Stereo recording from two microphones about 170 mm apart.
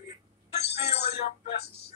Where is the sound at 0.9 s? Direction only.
75° left (ahead or behind).